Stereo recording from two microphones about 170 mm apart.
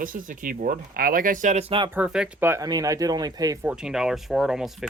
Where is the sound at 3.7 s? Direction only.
5° right (ahead or behind).